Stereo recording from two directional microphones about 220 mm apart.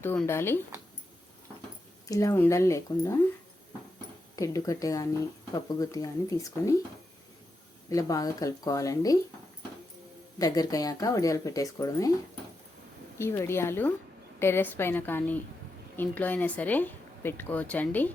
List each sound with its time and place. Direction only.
0.0 s speech: 10° left (ahead or behind)
2.0 s speech: 15° left (ahead or behind)
4.4 s speech: 15° left (ahead or behind)
7.9 s speech: 15° left (ahead or behind)
10.3 s speech: 15° left (ahead or behind)
13.1 s speech: 10° left (ahead or behind)